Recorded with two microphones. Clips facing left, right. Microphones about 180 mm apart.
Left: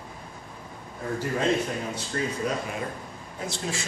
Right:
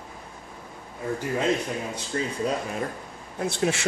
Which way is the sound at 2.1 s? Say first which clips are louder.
Right 1 dB; 25° right (ahead or behind).